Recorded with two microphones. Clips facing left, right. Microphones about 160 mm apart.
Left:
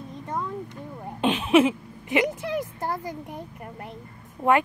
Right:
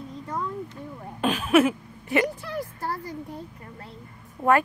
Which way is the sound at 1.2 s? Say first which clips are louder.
Left 1 dB; 25° left (ahead or behind).